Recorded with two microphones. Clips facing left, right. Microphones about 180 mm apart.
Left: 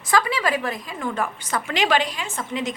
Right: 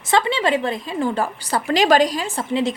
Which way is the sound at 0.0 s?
25° right (ahead or behind).